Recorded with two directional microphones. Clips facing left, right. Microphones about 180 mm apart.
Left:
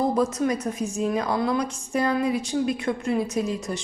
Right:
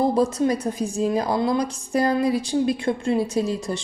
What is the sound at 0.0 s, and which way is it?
A woman's voice, 30° right (ahead or behind).